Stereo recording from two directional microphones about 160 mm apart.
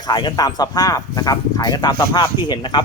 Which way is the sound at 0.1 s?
25° left (ahead or behind).